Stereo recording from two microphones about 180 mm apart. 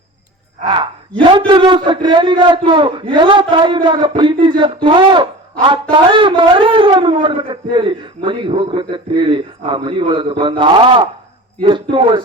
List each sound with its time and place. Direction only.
1.2 s speech: 25° right (ahead or behind)